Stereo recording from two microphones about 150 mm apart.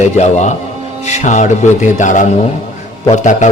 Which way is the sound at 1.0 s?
50° left (ahead or behind).